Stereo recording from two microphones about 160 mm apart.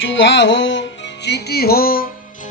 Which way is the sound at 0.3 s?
90° left.